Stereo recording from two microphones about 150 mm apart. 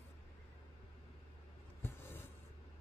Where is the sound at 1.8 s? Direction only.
15° left (ahead or behind).